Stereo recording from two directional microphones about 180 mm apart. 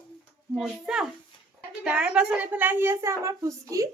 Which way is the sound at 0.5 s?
5° right (ahead or behind).